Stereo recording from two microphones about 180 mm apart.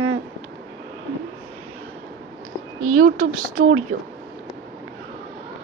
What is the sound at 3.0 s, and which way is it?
Speech, 50° right (ahead or behind).